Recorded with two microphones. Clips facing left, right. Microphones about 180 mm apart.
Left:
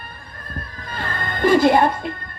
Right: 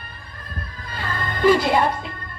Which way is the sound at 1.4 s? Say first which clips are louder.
Left 3 dB; 50° left (ahead or behind).